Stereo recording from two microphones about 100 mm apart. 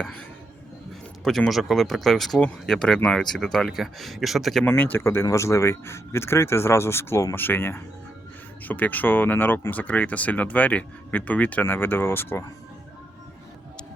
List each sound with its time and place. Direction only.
1.2 s speech: 5° left (ahead or behind)
4.6 s speech: 20° left (ahead or behind)